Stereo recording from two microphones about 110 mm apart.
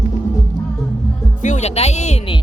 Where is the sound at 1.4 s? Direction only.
90° left.